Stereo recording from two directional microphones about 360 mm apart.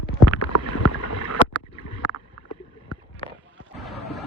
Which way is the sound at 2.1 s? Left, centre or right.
Left.